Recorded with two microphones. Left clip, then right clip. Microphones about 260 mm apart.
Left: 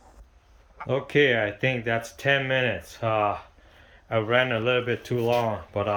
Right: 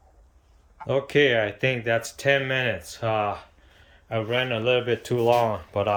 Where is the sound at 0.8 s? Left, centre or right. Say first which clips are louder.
Right 1 dB; centre.